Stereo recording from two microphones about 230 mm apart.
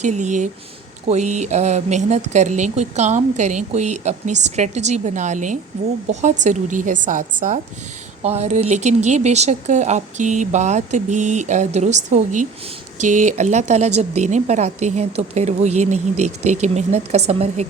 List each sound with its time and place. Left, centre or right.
0.0 s speech: right
8.2 s a woman's voice: right